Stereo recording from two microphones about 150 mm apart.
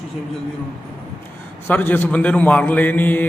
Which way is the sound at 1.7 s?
15° left (ahead or behind).